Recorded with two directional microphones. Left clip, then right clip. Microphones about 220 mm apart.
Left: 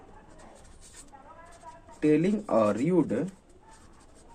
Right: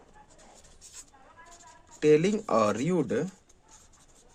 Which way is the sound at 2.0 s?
45° right (ahead or behind).